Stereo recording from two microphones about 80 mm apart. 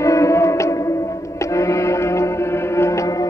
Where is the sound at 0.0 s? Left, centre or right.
Left.